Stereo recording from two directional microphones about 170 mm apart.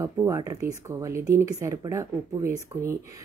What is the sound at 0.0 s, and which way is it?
Speech, 15° right (ahead or behind).